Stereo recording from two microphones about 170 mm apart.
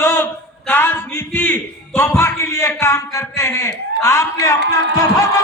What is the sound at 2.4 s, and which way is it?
A man's voice, 15° left (ahead or behind).